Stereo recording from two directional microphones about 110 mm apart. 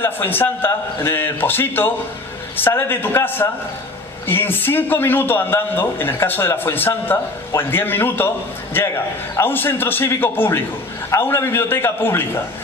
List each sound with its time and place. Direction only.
0.0 s a man's voice: 20° left (ahead or behind)